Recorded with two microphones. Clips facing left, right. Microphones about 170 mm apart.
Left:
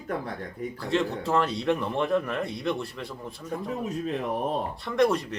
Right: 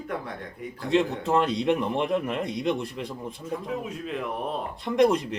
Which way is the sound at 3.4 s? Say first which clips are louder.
Left 1 dB; 40° left (ahead or behind).